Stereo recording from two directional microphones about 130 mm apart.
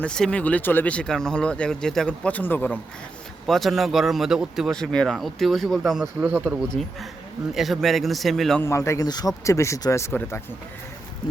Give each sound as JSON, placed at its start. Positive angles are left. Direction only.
{"t": 0.0, "sound": "speech", "side_deg": 5}
{"t": 3.4, "sound": "speech", "side_deg": 0}
{"t": 6.4, "sound": "speech", "side_deg": 0}
{"t": 8.6, "sound": "speech", "side_deg": 20}